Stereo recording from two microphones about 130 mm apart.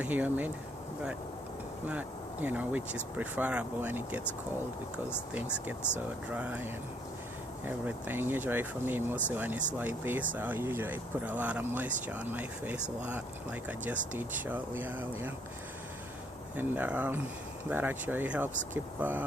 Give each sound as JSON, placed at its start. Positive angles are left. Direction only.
{"t": 0.0, "sound": "speech", "side_deg": -15}
{"t": 1.9, "sound": "speech", "side_deg": -10}
{"t": 5.3, "sound": "speech", "side_deg": -10}
{"t": 16.6, "sound": "speech", "side_deg": -15}